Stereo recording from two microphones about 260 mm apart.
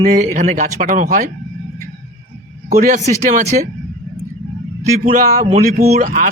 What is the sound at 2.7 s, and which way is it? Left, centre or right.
Speech, right.